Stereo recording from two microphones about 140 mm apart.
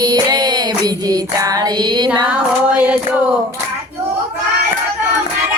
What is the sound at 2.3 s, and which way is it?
Female singing, 10° right (ahead or behind).